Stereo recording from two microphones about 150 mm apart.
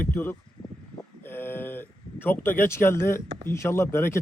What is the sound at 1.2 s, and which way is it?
Speech, 15° left (ahead or behind).